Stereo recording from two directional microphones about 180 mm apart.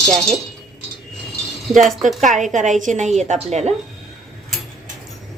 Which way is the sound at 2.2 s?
45° right (ahead or behind).